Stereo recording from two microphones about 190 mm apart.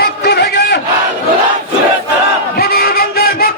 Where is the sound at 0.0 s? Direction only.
60° left (ahead or behind).